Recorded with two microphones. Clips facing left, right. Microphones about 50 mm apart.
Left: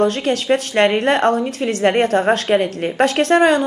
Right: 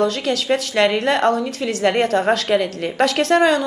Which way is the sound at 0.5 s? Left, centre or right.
Left.